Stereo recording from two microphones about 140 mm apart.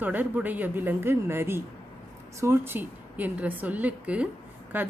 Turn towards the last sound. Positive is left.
turn(degrees=-15)  # may be behind; listen again after turning